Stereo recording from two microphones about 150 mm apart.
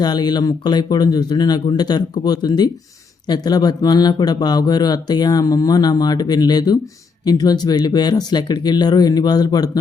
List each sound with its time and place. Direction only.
0.0 s speech: 30° left (ahead or behind)